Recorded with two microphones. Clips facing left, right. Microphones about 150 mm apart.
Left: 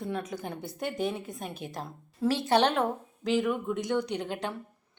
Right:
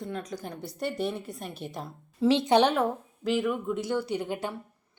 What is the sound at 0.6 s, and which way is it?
Speech, 50° left (ahead or behind).